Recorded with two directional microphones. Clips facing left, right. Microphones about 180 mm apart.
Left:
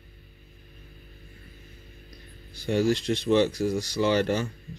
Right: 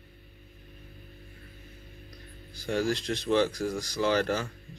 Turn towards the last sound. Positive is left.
turn(degrees=0)  # may be behind; listen again after turning